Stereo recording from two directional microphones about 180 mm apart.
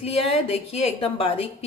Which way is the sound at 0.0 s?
35° left (ahead or behind).